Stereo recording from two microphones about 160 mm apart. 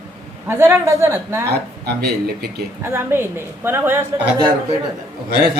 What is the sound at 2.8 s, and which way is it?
A woman's voice, 15° right (ahead or behind).